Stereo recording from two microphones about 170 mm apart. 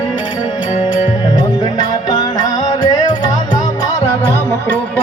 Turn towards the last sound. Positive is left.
turn(degrees=15)  # may be behind; listen again after turning